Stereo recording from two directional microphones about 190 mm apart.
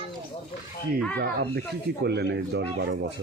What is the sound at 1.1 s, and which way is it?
Speech, 55° right (ahead or behind).